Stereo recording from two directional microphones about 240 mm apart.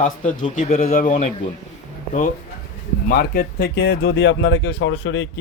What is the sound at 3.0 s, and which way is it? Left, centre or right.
Speech, left.